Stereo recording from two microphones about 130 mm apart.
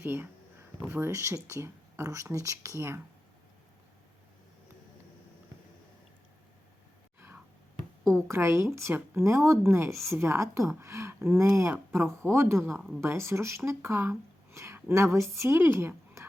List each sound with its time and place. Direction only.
0.0 s speech: 15° right (ahead or behind)
8.3 s speech: 20° right (ahead or behind)